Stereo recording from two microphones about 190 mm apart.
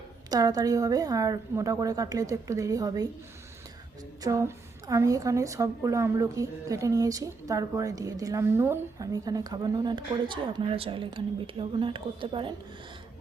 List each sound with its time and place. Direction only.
0.3 s a woman's voice: 20° right (ahead or behind)
4.2 s a woman's voice: 15° right (ahead or behind)